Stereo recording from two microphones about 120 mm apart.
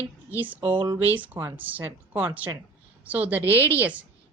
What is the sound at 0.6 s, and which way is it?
Speech, 45° right (ahead or behind).